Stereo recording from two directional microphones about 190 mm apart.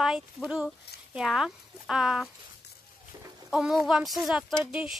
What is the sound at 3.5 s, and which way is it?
Speech, 5° right (ahead or behind).